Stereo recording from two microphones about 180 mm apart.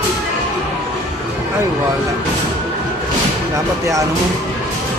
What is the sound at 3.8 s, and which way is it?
Music, 15° right (ahead or behind).